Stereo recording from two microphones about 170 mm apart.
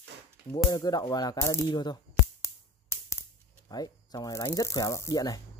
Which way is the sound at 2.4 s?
15° left (ahead or behind).